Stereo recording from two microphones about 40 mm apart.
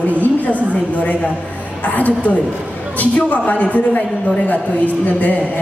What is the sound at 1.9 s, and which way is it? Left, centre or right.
A woman's voice, left.